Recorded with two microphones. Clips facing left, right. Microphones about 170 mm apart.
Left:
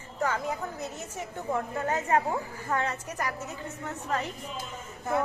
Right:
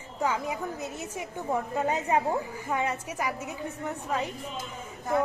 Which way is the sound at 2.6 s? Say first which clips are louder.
Left 1 dB; 10° right (ahead or behind).